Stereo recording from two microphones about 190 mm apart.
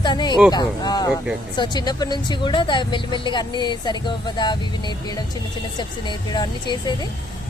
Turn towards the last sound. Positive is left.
turn(degrees=20)  # may be behind; listen again after turning